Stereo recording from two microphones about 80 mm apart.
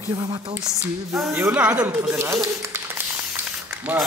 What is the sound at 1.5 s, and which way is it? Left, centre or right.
Speech, centre.